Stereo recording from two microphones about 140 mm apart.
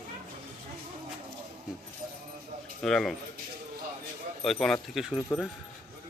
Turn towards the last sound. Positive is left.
turn(degrees=0)  # may be behind; listen again after turning